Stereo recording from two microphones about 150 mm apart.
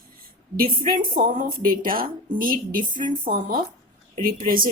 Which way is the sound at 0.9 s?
70° right (ahead or behind).